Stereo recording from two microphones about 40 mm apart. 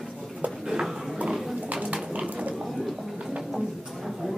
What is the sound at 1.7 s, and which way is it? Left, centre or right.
Bird, right.